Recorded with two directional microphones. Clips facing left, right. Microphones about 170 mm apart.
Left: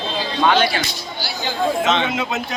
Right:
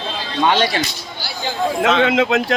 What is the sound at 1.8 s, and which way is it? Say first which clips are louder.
Speech: right 5 dB; 80° right.